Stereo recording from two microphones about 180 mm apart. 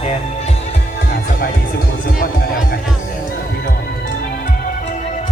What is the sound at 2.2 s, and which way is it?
Speech, 50° left (ahead or behind).